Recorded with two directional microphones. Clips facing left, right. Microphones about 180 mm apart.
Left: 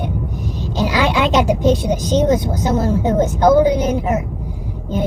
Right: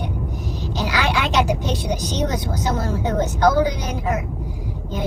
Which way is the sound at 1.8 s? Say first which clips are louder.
Left 8 dB; 55° left (ahead or behind).